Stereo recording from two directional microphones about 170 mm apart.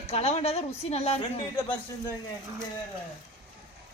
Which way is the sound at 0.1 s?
40° left (ahead or behind).